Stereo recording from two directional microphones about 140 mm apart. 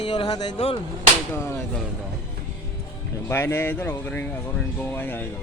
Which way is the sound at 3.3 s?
20° left (ahead or behind).